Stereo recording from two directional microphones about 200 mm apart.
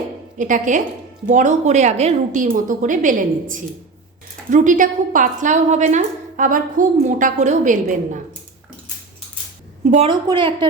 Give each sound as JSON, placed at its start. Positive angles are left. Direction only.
{"t": 0.3, "sound": "a woman's voice", "side_deg": -40}
{"t": 9.9, "sound": "a woman's voice", "side_deg": -30}